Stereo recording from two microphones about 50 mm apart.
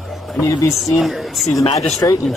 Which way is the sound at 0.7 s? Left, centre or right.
Centre.